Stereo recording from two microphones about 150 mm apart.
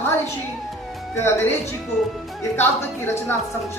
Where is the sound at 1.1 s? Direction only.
15° left (ahead or behind).